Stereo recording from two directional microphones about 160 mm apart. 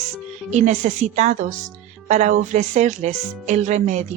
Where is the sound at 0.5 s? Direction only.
45° right (ahead or behind).